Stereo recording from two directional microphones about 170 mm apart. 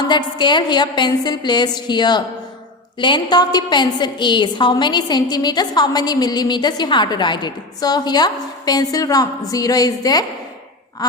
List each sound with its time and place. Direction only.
0.1 s a woman's voice: 25° left (ahead or behind)